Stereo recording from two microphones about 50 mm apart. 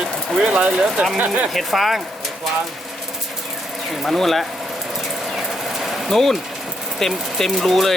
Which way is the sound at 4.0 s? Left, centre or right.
Centre.